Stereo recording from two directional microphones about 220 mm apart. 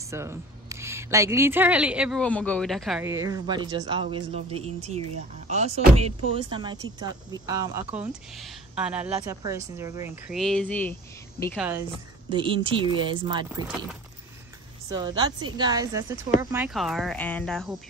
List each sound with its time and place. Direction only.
0.1 s speech: 15° right (ahead or behind)
3.1 s speech: 15° right (ahead or behind)
10.2 s speech: centre (ahead or behind)
11.5 s speech: 5° right (ahead or behind)
12.3 s speech: 20° right (ahead or behind)
15.0 s speech: 20° right (ahead or behind); by 17.7 s centre (ahead or behind)